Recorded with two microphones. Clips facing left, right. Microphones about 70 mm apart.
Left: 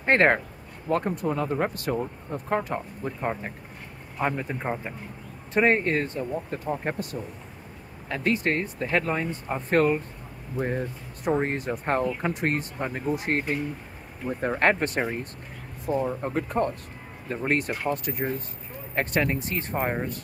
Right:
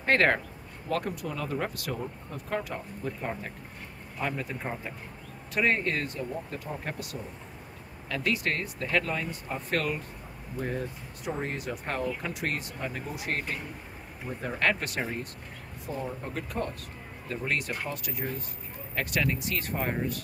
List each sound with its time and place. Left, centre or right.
0.0 s speech: left